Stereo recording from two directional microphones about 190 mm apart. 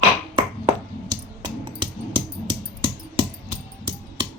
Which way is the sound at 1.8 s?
25° right (ahead or behind).